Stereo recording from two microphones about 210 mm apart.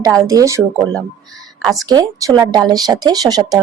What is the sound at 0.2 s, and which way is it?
Speech, 15° right (ahead or behind).